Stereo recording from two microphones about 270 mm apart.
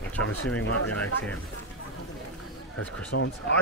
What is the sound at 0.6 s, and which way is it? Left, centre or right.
Speech, left.